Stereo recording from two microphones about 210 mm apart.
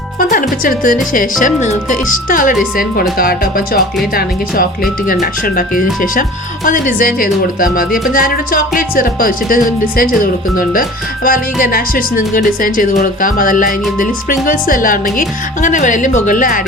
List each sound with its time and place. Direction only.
0.2 s speech: 40° left (ahead or behind)